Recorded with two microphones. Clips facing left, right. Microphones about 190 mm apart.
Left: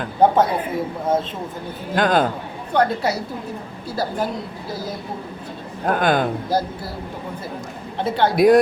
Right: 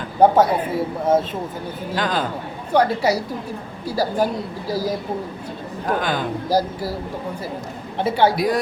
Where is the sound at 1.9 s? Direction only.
50° left (ahead or behind).